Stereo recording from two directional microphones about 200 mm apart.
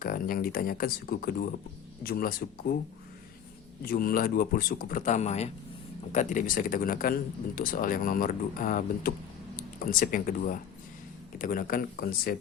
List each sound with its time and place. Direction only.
0.0 s speech: 45° left (ahead or behind)
3.8 s speech: 45° left (ahead or behind)